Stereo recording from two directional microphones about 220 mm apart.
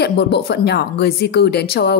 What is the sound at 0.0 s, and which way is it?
A woman's voice, 50° left (ahead or behind).